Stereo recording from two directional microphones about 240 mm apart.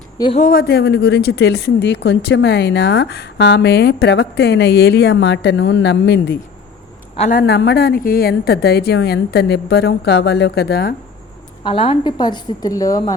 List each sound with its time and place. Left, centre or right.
0.2 s speech: left
0.4 s speech: left
7.2 s speech: left
11.6 s a woman's voice: left